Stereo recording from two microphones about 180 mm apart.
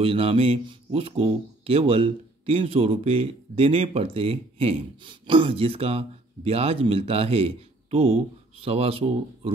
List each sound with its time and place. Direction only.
0.0 s speech: 30° right (ahead or behind)